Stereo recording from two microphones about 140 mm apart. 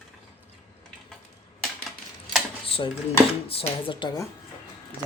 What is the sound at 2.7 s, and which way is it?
Dishes, 40° left (ahead or behind).